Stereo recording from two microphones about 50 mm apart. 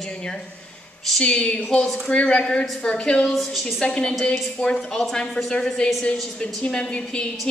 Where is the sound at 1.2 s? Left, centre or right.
Centre.